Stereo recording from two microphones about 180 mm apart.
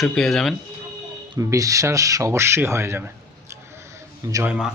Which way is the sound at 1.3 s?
20° right (ahead or behind).